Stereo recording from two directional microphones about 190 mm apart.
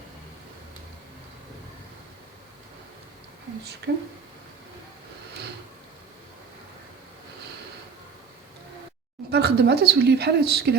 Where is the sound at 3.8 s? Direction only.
65° right (ahead or behind).